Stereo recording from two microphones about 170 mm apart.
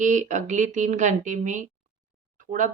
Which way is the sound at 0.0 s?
45° right (ahead or behind).